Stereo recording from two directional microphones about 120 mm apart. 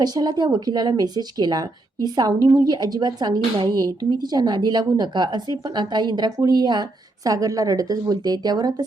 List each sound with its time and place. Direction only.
0.0 s a woman's voice: 35° right (ahead or behind)